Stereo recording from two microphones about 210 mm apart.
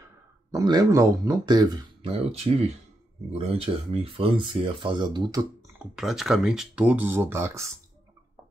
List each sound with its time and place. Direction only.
0.5 s speech: 15° right (ahead or behind)
5.9 s speech: centre (ahead or behind)